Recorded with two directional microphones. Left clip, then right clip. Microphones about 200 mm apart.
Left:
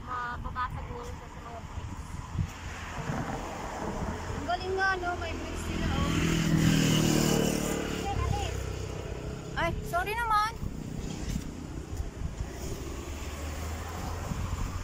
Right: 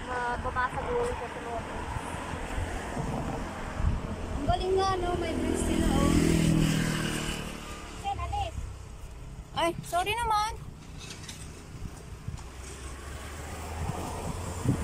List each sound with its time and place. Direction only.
0.1 s vehicle: 45° right (ahead or behind)
4.5 s vehicle: 15° right (ahead or behind)
5.3 s vehicle: 40° right (ahead or behind); by 6.5 s 25° right (ahead or behind)
6.5 s vehicle: 5° right (ahead or behind)
6.8 s vehicle: 15° left (ahead or behind); by 8.0 s 40° left (ahead or behind)
9.6 s vehicle: 15° right (ahead or behind)